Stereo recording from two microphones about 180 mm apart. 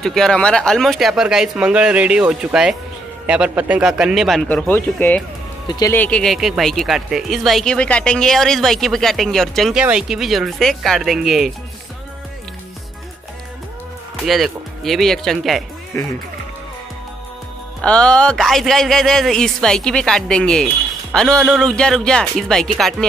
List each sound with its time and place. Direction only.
0.0 s speech: centre (ahead or behind)
5.7 s speech: 20° left (ahead or behind)
5.9 s speech: 5° left (ahead or behind)
14.2 s speech: centre (ahead or behind)
15.9 s speech: 10° left (ahead or behind)
17.8 s speech: 5° left (ahead or behind)